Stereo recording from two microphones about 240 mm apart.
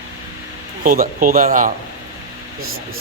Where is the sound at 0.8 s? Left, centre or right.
Right.